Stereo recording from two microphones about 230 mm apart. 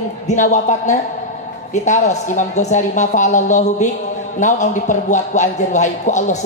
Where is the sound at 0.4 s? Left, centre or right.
Left.